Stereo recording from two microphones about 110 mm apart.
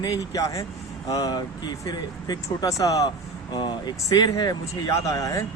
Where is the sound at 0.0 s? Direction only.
35° left (ahead or behind).